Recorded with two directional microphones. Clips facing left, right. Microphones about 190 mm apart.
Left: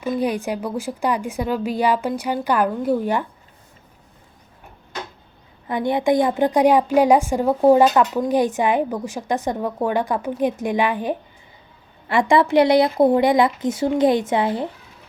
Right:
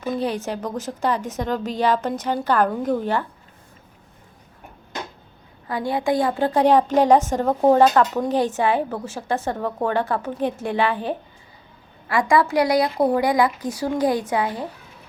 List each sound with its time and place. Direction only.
0.0 s a woman's voice: 10° left (ahead or behind)
5.6 s a woman's voice: 20° left (ahead or behind)
12.0 s a woman's voice: 25° left (ahead or behind)